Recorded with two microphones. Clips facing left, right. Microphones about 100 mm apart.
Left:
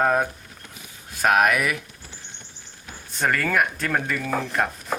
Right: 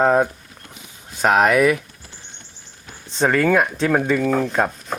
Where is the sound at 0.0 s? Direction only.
20° right (ahead or behind).